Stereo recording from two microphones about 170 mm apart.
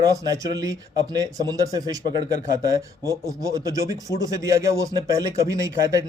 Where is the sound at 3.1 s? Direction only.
20° right (ahead or behind).